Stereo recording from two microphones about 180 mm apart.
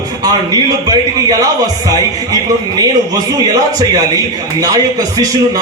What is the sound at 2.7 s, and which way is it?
A man's voice, 20° right (ahead or behind).